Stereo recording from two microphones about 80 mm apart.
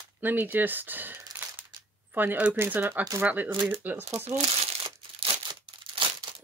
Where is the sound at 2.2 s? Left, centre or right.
Right.